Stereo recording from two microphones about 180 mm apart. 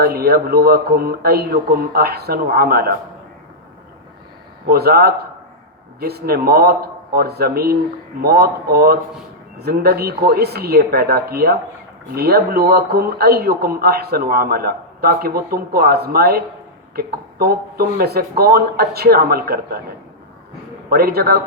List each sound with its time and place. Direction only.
0.0 s a man's voice: 60° right (ahead or behind)
4.6 s a man's voice: 60° right (ahead or behind)
20.9 s a man's voice: 60° right (ahead or behind)